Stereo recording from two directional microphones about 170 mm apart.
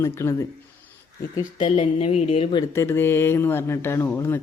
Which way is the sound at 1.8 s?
35° left (ahead or behind).